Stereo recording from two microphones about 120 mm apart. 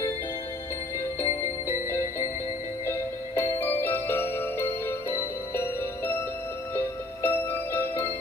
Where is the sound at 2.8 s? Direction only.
20° left (ahead or behind).